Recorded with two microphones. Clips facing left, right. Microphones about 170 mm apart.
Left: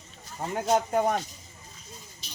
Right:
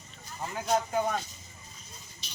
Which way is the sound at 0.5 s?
35° left (ahead or behind).